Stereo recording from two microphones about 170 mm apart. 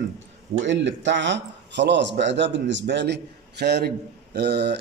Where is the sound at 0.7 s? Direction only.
90° right.